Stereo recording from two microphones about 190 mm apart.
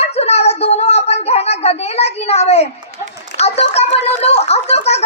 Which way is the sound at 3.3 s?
35° left (ahead or behind).